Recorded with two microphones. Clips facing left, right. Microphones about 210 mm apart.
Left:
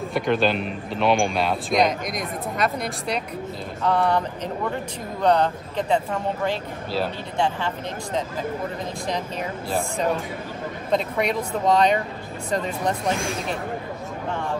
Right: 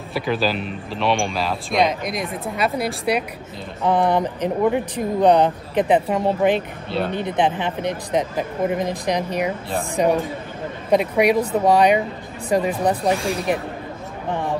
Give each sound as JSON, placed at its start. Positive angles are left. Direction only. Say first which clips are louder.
{"t": 0.1, "sound": "speech", "louder": "even", "side_deg": -5}